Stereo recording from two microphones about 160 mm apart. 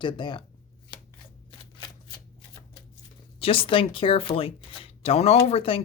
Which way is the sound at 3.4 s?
35° left (ahead or behind).